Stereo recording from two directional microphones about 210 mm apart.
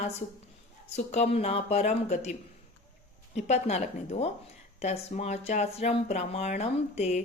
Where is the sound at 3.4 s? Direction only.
30° left (ahead or behind).